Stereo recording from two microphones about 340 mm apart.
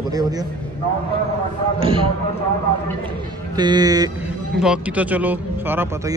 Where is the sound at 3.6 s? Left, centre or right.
Centre.